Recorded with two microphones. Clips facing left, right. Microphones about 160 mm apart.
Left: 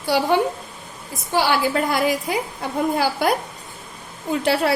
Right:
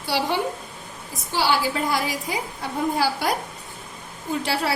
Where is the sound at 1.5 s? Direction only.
60° left (ahead or behind).